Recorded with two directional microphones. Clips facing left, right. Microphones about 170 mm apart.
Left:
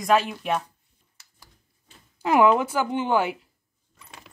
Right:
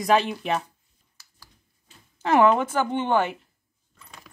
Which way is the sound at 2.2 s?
10° left (ahead or behind).